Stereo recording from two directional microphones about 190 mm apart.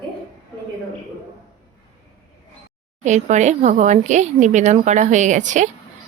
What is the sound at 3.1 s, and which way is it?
Speech, 40° right (ahead or behind).